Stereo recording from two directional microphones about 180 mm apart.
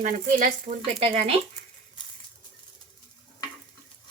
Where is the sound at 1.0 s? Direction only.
35° right (ahead or behind).